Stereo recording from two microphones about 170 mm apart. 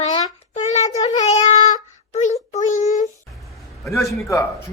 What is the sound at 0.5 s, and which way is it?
Wind instrument, 45° left (ahead or behind).